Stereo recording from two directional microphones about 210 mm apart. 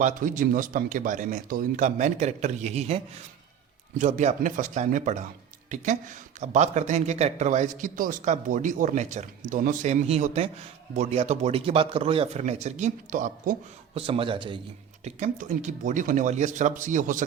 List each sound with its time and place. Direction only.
0.0 s speech: 40° right (ahead or behind)
13.9 s a man's voice: 25° right (ahead or behind)
15.0 s speech: 35° right (ahead or behind)